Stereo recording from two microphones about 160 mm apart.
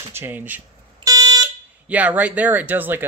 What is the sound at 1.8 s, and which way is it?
Speech, 10° right (ahead or behind).